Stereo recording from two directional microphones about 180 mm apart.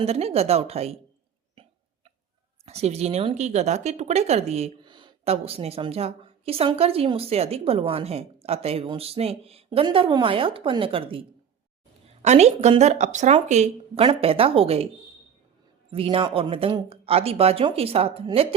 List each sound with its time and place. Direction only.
0.0 s a woman's voice: 35° right (ahead or behind)
2.6 s a woman's voice: 35° right (ahead or behind)
15.9 s a woman's voice: 30° right (ahead or behind)